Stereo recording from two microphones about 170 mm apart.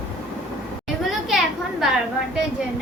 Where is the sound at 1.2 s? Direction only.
Centre (ahead or behind).